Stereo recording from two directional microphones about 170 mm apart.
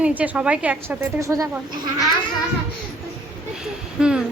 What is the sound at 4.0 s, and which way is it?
Speech, 5° right (ahead or behind).